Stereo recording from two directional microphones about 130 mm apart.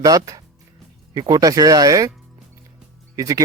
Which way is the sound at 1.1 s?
30° right (ahead or behind).